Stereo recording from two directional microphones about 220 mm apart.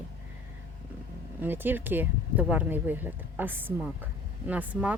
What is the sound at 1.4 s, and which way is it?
Speech, 10° right (ahead or behind).